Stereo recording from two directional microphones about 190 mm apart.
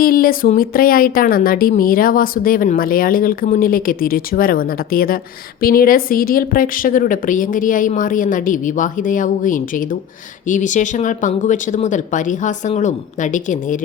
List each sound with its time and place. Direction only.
0.0 s speech: 50° left (ahead or behind)